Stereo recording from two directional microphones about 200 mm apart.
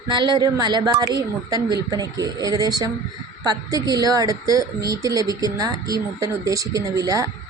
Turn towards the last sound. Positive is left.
turn(degrees=-15)  # may be behind; listen again after turning